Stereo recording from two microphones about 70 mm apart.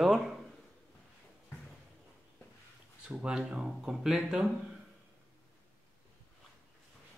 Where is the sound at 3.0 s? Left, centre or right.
Centre.